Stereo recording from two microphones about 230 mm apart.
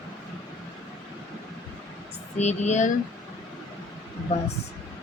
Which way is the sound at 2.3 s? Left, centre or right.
Left.